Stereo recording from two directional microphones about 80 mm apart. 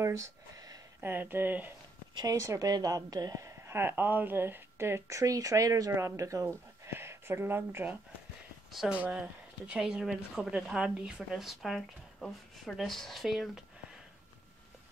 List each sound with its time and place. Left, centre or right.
0.0 s a sound: right
1.0 s speech: right
2.3 s a woman's voice: right
8.7 s speech: centre